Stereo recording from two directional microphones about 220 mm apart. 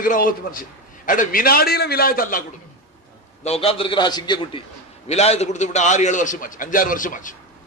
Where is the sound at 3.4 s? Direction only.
25° left (ahead or behind).